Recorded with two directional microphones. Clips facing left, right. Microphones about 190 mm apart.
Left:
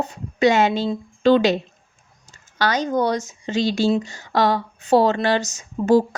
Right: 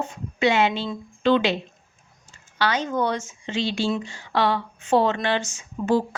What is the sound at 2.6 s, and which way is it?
Speech, 40° left (ahead or behind).